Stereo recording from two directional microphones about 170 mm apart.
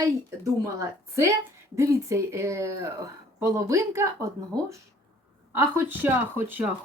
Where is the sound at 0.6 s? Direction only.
15° right (ahead or behind).